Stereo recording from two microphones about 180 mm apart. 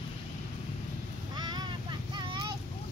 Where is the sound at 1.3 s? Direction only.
25° right (ahead or behind).